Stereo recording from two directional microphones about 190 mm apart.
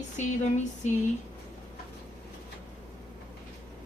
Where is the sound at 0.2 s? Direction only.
40° left (ahead or behind).